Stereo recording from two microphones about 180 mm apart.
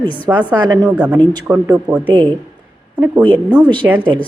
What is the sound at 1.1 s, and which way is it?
Speech, 25° right (ahead or behind).